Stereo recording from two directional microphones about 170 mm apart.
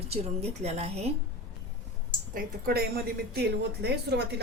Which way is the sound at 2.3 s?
60° right (ahead or behind).